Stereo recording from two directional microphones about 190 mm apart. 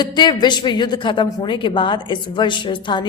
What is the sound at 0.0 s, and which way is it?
A woman's voice, 25° left (ahead or behind).